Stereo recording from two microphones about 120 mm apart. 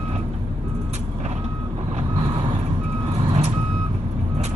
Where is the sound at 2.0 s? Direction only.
50° right (ahead or behind).